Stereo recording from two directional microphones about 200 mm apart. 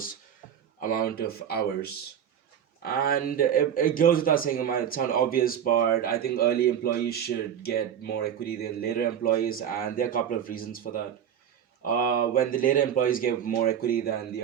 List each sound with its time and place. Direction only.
0.8 s a man's voice: 45° left (ahead or behind)